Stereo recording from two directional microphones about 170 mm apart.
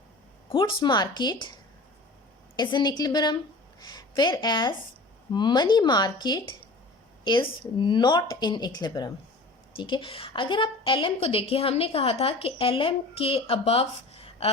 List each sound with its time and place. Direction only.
0.5 s speech: 30° left (ahead or behind)
2.6 s a woman's voice: 25° left (ahead or behind)